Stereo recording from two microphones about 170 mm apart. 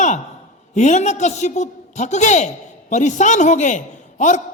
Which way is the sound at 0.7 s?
45° left (ahead or behind).